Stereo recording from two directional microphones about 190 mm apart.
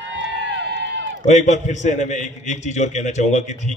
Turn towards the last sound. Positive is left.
turn(degrees=40)  # may be behind; listen again after turning